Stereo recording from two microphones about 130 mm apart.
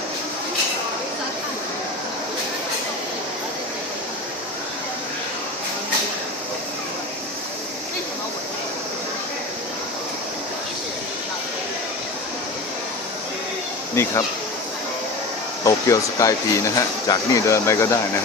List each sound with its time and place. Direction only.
13.9 s speech: 20° left (ahead or behind)
15.6 s speech: 25° left (ahead or behind)